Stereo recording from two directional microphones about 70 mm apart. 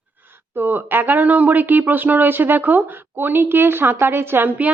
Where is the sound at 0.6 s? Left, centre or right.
Right.